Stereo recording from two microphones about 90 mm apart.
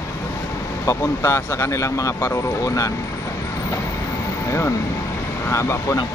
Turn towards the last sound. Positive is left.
turn(degrees=35)  # may be behind; listen again after turning